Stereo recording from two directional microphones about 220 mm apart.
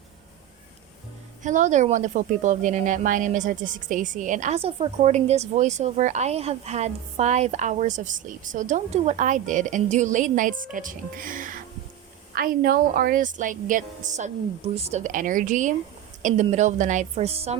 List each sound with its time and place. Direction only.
1.4 s speech: 35° right (ahead or behind)